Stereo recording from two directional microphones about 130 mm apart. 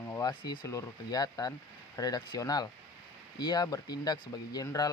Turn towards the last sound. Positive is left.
turn(degrees=30)  # may be behind; listen again after turning